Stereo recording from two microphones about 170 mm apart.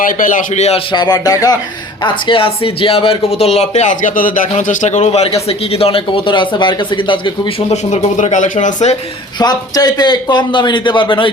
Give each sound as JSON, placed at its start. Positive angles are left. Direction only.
{"t": 0.0, "sound": "speech", "side_deg": 50}
{"t": 7.9, "sound": "speech", "side_deg": 45}
{"t": 9.4, "sound": "a man's voice", "side_deg": 25}